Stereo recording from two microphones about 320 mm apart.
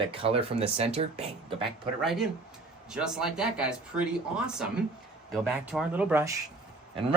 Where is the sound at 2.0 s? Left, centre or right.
Centre.